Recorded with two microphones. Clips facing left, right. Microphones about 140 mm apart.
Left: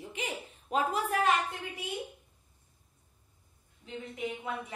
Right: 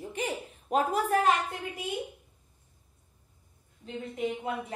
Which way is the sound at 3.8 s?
45° right (ahead or behind).